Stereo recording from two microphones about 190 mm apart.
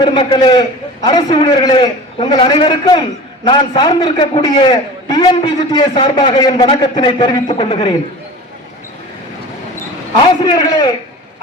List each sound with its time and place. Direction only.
0.0 s a man's voice: 25° left (ahead or behind)
10.4 s a man's voice: 20° left (ahead or behind)